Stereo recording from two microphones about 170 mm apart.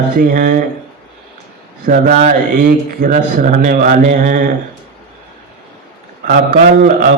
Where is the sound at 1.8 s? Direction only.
45° right (ahead or behind).